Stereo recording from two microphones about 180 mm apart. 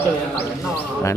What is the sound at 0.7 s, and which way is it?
Speech, 15° left (ahead or behind).